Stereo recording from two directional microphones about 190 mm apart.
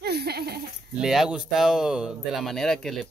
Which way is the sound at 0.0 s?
60° right (ahead or behind).